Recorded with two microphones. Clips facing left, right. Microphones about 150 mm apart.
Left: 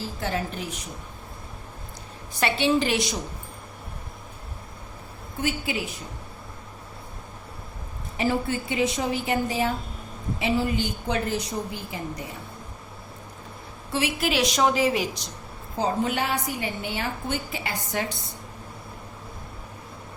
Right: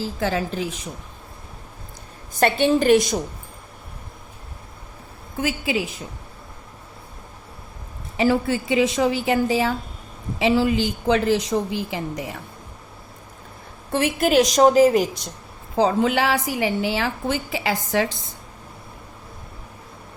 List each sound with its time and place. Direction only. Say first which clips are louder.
0.2 s a woman's voice: right 5 dB; 90° right
2.3 s a woman's voice: right 4 dB; 50° right (ahead or behind)
5.4 s a woman's voice: right 3 dB; 90° right
8.2 s a woman's voice: right 5 dB; 90° right
13.9 s a woman's voice: right 7 dB; 50° right (ahead or behind)
15.8 s a woman's voice: right 6 dB; 90° right